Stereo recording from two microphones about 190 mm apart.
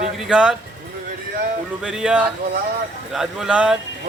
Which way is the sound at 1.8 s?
5° right (ahead or behind).